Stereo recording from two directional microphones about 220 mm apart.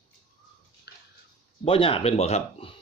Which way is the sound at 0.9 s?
45° left (ahead or behind).